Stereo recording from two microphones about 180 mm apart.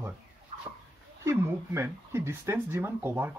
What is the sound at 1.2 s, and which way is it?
Speech, 15° right (ahead or behind).